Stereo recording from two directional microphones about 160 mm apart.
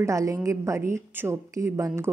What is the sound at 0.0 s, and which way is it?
Speech, 20° right (ahead or behind).